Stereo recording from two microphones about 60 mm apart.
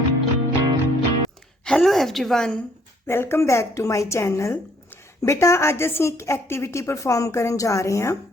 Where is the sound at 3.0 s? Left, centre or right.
Left.